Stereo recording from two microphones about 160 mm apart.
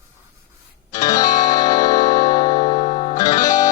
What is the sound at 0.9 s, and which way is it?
Music, 25° left (ahead or behind).